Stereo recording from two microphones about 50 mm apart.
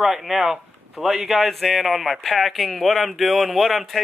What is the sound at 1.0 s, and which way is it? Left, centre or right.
Speech, centre.